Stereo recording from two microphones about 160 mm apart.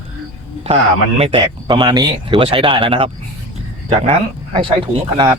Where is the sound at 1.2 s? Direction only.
35° right (ahead or behind).